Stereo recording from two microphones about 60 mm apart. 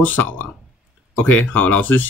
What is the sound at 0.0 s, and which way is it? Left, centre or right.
Speech, left.